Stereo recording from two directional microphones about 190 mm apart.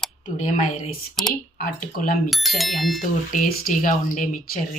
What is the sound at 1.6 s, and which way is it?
Speech, 45° left (ahead or behind).